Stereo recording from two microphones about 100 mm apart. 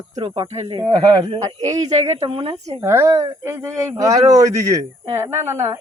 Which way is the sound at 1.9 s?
90° right.